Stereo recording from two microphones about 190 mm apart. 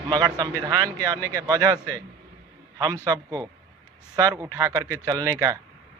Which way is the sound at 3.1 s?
15° right (ahead or behind).